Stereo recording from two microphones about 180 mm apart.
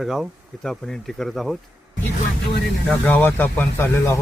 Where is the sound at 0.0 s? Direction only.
Centre (ahead or behind).